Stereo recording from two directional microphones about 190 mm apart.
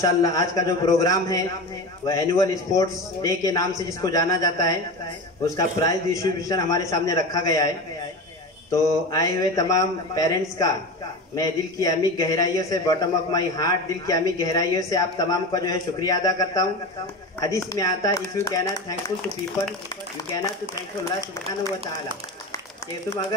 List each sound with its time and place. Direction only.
0.0 s a man's voice: 20° left (ahead or behind)
8.7 s a man's voice: 20° left (ahead or behind)